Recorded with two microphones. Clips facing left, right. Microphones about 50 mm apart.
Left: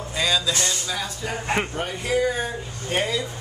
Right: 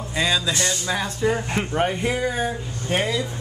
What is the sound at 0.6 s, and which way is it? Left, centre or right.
Speech, right.